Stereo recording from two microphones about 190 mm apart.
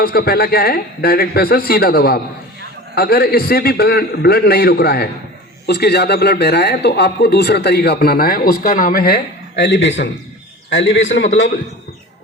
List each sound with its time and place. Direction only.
0.0 s a man's voice: 55° left (ahead or behind); by 11.4 s 80° left